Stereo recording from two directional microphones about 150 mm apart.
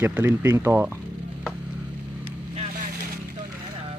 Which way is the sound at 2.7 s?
75° right (ahead or behind).